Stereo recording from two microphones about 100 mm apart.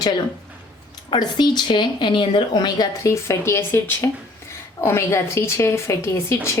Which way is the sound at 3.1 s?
25° left (ahead or behind).